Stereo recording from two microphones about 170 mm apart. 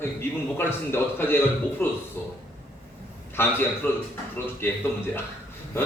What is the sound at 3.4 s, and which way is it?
Speech, 15° left (ahead or behind).